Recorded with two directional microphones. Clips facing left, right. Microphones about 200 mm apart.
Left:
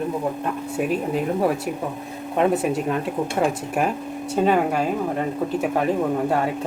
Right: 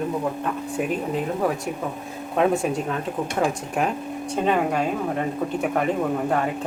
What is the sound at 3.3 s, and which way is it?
Speech, 5° left (ahead or behind).